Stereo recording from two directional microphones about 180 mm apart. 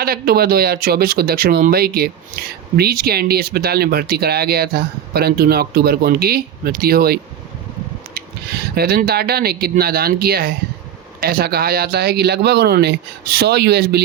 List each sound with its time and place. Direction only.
0.0 s speech: 60° right (ahead or behind)